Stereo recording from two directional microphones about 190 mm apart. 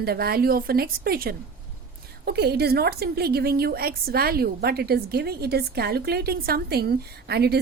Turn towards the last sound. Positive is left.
turn(degrees=-60)  # may be behind; listen again after turning